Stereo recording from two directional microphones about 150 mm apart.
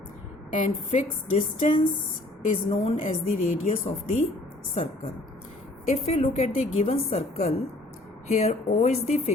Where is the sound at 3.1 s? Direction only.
55° left (ahead or behind).